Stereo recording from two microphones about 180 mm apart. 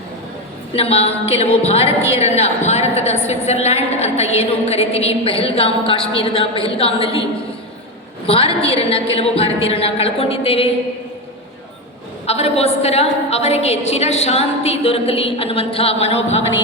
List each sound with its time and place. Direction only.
0.7 s a woman's voice: 35° left (ahead or behind)
8.3 s a woman's voice: 30° left (ahead or behind)
12.2 s a woman's voice: 35° left (ahead or behind)